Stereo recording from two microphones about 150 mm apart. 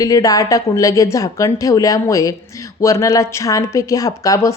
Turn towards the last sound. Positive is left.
turn(degrees=20)  # may be behind; listen again after turning